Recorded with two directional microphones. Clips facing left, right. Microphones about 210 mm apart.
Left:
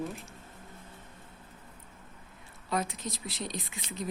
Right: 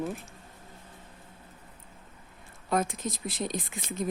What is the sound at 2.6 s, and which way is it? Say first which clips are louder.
Speech: right 4 dB; 50° right (ahead or behind).